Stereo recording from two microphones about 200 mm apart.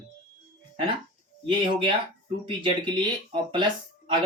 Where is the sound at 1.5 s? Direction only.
25° right (ahead or behind).